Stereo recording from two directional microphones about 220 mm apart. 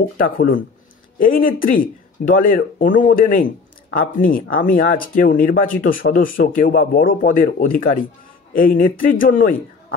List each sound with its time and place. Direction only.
0.2 s speech: 40° left (ahead or behind)